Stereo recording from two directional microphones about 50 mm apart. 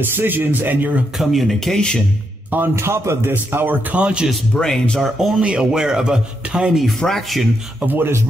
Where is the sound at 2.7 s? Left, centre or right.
Right.